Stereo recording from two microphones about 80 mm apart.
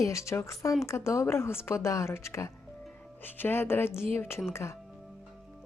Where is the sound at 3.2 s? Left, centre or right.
Left.